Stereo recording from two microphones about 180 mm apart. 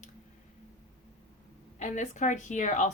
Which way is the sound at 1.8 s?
40° left (ahead or behind).